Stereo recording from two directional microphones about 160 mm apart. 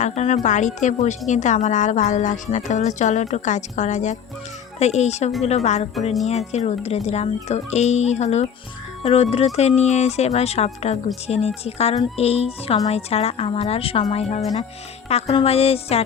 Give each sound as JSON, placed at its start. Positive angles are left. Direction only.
{"t": 0.0, "sound": "a woman's voice", "side_deg": 45}